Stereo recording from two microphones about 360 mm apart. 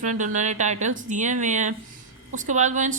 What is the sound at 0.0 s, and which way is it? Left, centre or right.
A woman's voice, centre.